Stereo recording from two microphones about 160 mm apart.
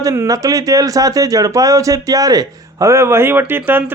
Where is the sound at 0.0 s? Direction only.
20° right (ahead or behind).